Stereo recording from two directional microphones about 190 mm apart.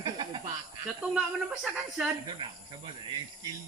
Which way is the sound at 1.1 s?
Centre (ahead or behind).